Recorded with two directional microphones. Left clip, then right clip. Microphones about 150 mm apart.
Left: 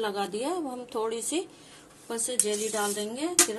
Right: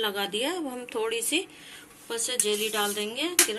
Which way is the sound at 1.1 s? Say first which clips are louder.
Right 3 dB; 35° left (ahead or behind).